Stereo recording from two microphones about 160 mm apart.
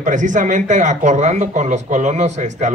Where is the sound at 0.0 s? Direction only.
50° right (ahead or behind).